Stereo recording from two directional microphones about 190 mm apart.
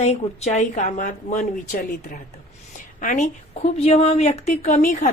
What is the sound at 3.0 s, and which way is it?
A woman's voice, 40° left (ahead or behind).